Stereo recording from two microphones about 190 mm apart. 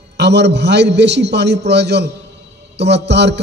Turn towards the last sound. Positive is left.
turn(degrees=-65)  # may be behind; listen again after turning